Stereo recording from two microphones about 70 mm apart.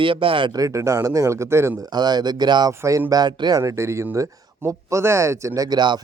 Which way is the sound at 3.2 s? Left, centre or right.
Right.